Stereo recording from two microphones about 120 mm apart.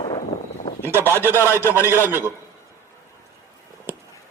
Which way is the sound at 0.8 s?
20° right (ahead or behind).